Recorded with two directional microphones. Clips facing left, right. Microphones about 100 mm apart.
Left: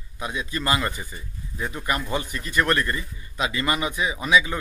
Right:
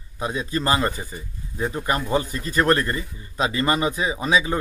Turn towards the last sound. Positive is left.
turn(degrees=-35)  # may be behind; listen again after turning